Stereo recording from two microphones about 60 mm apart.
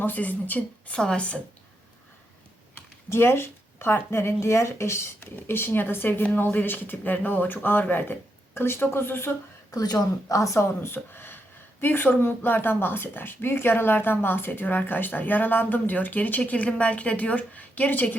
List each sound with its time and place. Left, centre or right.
0.0 s speech: left
0.9 s a woman's voice: centre
3.1 s speech: left
5.5 s speech: left
9.7 s a woman's voice: left
10.9 s speech: left